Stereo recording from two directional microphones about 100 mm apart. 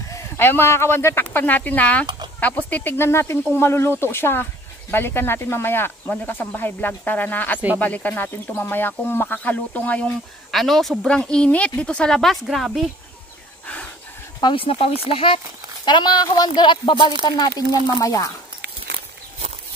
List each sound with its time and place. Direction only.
0.1 s speech: 25° left (ahead or behind)
2.0 s chicken: 50° right (ahead or behind)
2.4 s speech: 15° left (ahead or behind)
10.5 s speech: centre (ahead or behind)
14.4 s speech: 65° left (ahead or behind)
18.0 s speech: 35° left (ahead or behind)